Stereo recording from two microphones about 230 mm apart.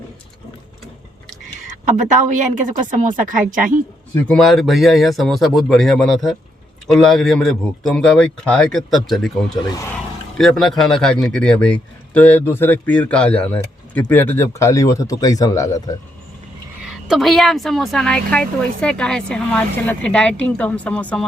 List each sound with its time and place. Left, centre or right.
1.6 s a woman's voice: right
4.1 s a woman's voice: centre
9.6 s speech: centre
16.8 s a woman's voice: centre